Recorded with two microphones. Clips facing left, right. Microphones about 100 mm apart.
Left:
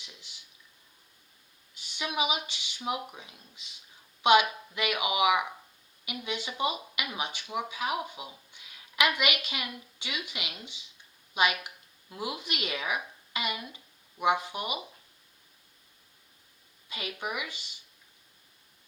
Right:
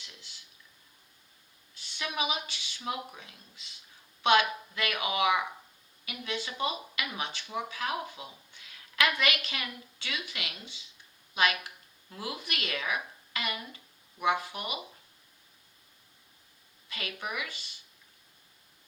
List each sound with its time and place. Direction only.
0.0 s speech: 15° left (ahead or behind)
1.7 s speech: 15° left (ahead or behind)
16.9 s speech: 20° left (ahead or behind)